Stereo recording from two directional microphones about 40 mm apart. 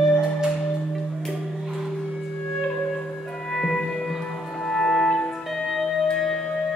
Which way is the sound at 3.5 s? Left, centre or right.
Centre.